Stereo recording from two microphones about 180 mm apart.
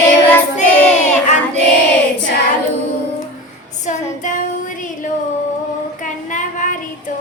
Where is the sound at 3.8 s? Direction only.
45° left (ahead or behind).